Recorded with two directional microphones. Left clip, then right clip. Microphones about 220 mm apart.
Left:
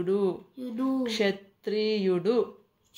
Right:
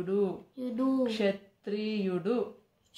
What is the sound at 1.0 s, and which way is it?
Speech, 35° left (ahead or behind).